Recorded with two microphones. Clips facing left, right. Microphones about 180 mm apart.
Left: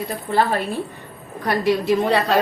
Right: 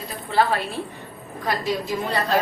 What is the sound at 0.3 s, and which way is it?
Speech, 50° left (ahead or behind).